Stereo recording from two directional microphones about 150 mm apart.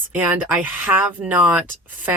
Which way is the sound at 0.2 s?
10° right (ahead or behind).